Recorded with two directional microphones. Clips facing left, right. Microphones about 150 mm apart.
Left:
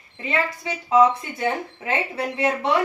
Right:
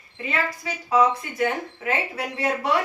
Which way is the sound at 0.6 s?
25° left (ahead or behind).